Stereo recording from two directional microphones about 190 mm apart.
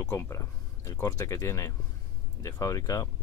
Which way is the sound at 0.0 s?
20° left (ahead or behind).